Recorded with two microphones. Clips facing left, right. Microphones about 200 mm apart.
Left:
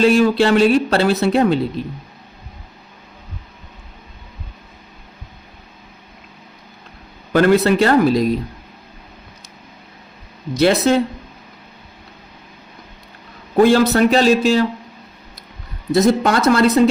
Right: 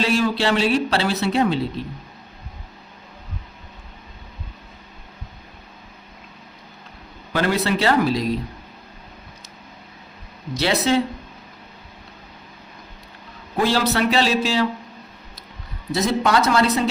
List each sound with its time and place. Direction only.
0.0 s speech: 50° left (ahead or behind)
7.3 s speech: 50° left (ahead or behind)
10.6 s speech: 50° left (ahead or behind)
13.6 s speech: 50° left (ahead or behind)
15.9 s speech: 50° left (ahead or behind)